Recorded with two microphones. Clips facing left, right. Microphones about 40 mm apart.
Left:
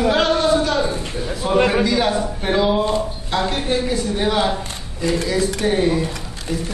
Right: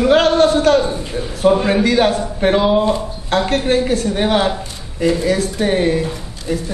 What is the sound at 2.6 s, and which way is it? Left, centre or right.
Speech, centre.